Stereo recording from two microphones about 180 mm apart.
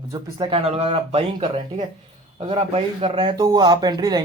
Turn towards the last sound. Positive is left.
turn(degrees=-20)  # may be behind; listen again after turning